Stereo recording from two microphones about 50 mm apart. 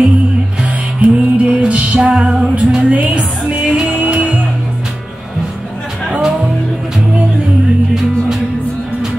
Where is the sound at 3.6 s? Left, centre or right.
Centre.